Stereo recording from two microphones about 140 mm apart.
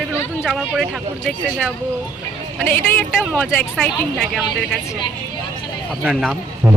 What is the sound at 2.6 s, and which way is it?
A woman's voice, 15° left (ahead or behind).